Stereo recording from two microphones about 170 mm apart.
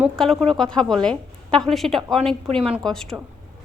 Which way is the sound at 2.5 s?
35° right (ahead or behind).